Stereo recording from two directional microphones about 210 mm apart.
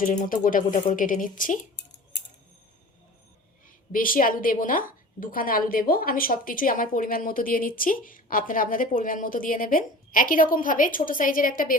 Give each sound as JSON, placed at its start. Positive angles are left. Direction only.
{"t": 0.0, "sound": "a woman's voice", "side_deg": 40}
{"t": 3.9, "sound": "a woman's voice", "side_deg": 40}